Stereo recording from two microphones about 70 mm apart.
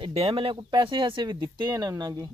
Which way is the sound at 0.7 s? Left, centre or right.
Right.